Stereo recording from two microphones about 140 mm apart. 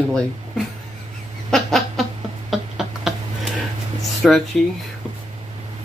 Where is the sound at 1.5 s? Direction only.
Centre (ahead or behind).